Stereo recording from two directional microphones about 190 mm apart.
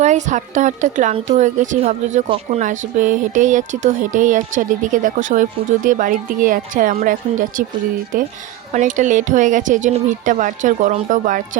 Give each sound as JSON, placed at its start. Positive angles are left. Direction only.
{"t": 0.0, "sound": "a woman's voice", "side_deg": -40}